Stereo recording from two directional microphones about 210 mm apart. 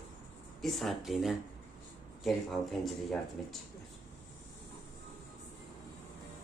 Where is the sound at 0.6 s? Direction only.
Centre (ahead or behind).